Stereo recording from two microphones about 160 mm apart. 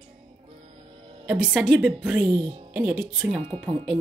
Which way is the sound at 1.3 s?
5° right (ahead or behind).